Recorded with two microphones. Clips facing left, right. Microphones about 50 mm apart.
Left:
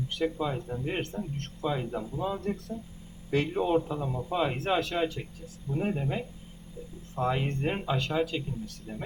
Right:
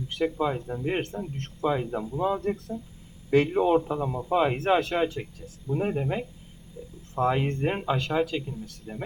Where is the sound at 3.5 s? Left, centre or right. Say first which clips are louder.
Right 4 dB; centre.